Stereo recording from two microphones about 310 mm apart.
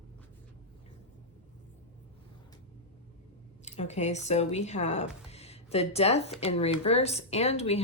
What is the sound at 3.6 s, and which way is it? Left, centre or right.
Speech, left.